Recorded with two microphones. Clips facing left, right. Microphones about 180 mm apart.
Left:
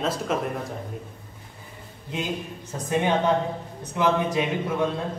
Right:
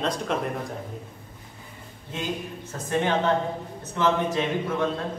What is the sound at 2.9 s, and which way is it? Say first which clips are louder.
Speech: left 1 dB; 15° left (ahead or behind).